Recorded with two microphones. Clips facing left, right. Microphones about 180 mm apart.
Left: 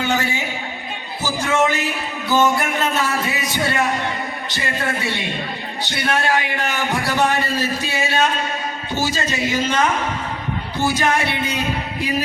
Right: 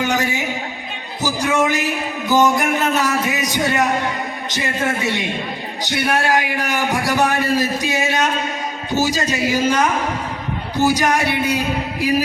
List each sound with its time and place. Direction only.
0.0 s a man's voice: 15° right (ahead or behind)
1.2 s a sound: 15° right (ahead or behind)
2.3 s a man's voice: 15° right (ahead or behind)
10.8 s a man's voice: 15° right (ahead or behind)